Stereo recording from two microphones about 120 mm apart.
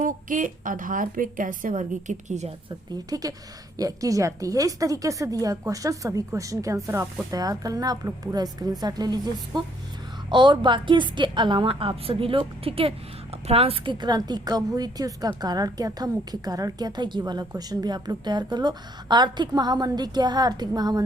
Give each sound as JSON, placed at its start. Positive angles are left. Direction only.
{"t": 0.0, "sound": "a woman's voice", "side_deg": -90}
{"t": 2.6, "sound": "a woman's voice", "side_deg": -35}
{"t": 14.0, "sound": "a woman's voice", "side_deg": -35}